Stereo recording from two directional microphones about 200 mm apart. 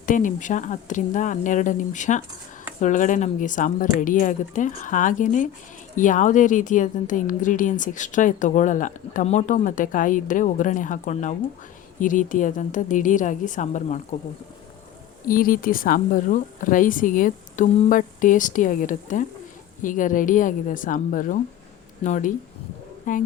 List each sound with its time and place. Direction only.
0.0 s a woman's voice: 40° left (ahead or behind)
15.3 s a woman's voice: 45° left (ahead or behind)